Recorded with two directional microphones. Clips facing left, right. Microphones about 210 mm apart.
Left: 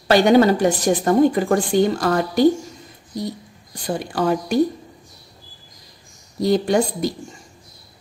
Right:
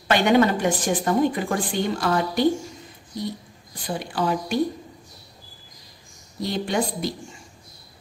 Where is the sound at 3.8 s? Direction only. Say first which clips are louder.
Left 4 dB; 45° left (ahead or behind).